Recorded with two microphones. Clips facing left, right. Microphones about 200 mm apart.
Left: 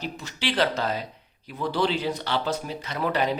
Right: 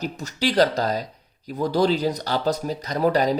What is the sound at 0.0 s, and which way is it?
Speech, 40° right (ahead or behind).